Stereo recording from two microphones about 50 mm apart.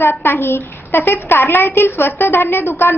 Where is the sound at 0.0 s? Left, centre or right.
Left.